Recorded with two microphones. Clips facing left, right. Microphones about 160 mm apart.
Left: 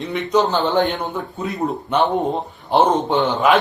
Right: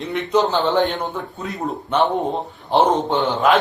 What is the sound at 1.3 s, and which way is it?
Speech, 20° left (ahead or behind).